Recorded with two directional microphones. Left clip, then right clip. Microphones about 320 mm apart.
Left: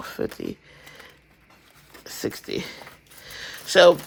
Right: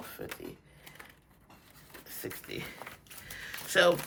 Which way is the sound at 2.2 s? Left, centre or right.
Centre.